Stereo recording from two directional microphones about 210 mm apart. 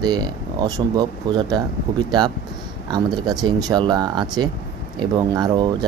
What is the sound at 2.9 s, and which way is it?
Speech, 20° right (ahead or behind).